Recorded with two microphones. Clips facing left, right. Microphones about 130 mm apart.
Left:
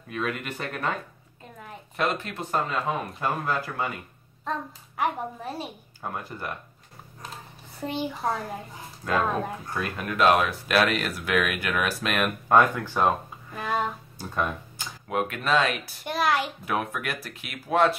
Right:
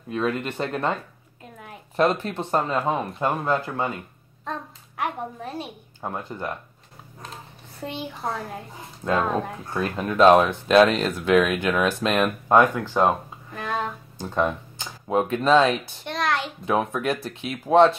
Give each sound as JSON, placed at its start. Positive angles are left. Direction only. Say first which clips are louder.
{"t": 0.1, "sound": "speech", "louder": "right 5 dB", "side_deg": -30}
{"t": 2.0, "sound": "speech", "louder": "right 6 dB", "side_deg": -35}
{"t": 4.5, "sound": "a sound", "louder": "left 1 dB", "side_deg": 0}
{"t": 5.9, "sound": "speech", "louder": "right 3 dB", "side_deg": -20}
{"t": 7.8, "sound": "a child's voice", "louder": "left 2 dB", "side_deg": 0}
{"t": 9.0, "sound": "speech", "louder": "right 2 dB", "side_deg": -20}
{"t": 12.5, "sound": "speech", "louder": "right 2 dB", "side_deg": -15}
{"t": 13.5, "sound": "a sound", "louder": "even", "side_deg": 5}
{"t": 14.1, "sound": "speech", "louder": "right 8 dB", "side_deg": -20}
{"t": 15.0, "sound": "speech", "louder": "right 6 dB", "side_deg": -30}
{"t": 15.8, "sound": "a child's voice", "louder": "left 1 dB", "side_deg": 5}
{"t": 16.6, "sound": "speech", "louder": "right 6 dB", "side_deg": -25}